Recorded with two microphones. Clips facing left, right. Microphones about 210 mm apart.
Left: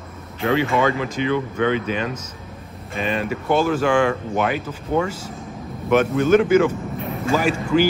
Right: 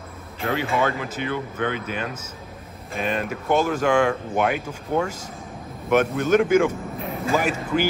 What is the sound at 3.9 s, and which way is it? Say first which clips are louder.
Speech: left 1 dB; 5° right (ahead or behind).